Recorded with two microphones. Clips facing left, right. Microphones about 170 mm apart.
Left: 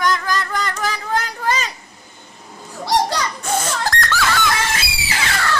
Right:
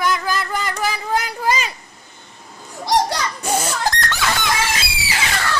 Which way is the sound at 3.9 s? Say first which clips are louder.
Left 3 dB; 20° right (ahead or behind).